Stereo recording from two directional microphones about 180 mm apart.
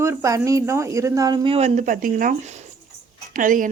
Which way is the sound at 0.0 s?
15° right (ahead or behind).